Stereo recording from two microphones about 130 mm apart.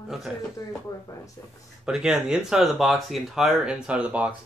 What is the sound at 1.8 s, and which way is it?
Speech, 5° right (ahead or behind).